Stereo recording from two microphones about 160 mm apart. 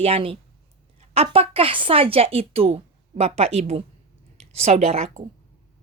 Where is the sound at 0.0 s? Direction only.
35° right (ahead or behind).